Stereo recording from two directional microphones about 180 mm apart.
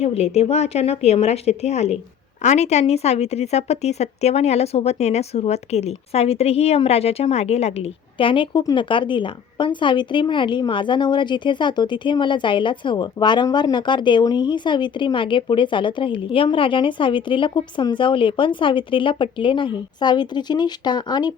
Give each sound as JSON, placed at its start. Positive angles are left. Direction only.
{"t": 0.0, "sound": "a woman's voice", "side_deg": 35}